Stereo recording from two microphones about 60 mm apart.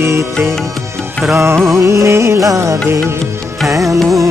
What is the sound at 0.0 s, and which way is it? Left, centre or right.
Music, right.